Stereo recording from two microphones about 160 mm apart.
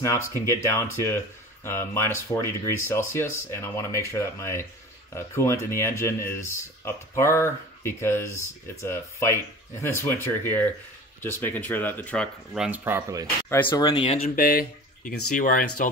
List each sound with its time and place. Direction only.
0.5 s speech: 15° left (ahead or behind)
12.5 s speech: 10° right (ahead or behind)
13.7 s speech: 25° left (ahead or behind)
14.3 s speech: 65° left (ahead or behind)